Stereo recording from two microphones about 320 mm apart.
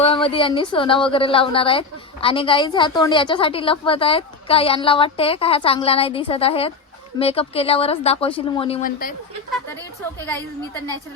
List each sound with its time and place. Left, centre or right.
0.0 s a woman's voice: centre